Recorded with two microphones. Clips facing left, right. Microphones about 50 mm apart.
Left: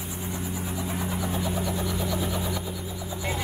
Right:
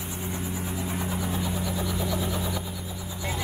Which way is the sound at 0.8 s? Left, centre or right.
Centre.